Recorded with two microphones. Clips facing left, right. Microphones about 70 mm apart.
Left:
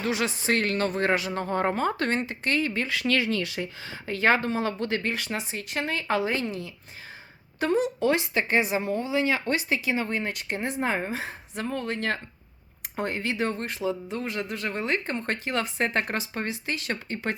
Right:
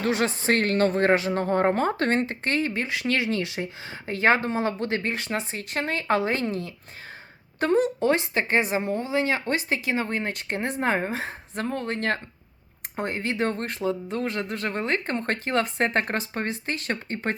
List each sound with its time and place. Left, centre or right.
0.0 s speech: right
13.0 s speech: right